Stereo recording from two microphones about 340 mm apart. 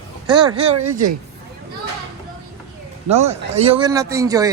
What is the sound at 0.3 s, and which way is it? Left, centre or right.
Speech, centre.